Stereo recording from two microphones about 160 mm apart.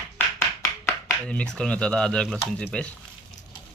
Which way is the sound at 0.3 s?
15° left (ahead or behind).